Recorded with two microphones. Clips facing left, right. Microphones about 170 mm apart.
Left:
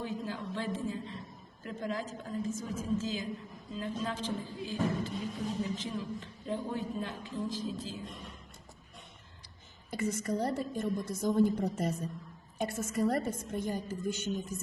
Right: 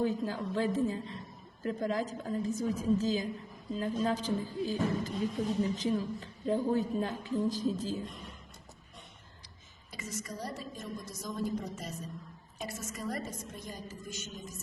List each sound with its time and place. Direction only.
0.0 s a woman's voice: 40° right (ahead or behind)
9.9 s a woman's voice: 55° left (ahead or behind)